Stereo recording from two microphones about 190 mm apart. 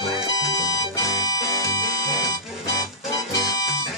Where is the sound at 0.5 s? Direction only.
20° left (ahead or behind).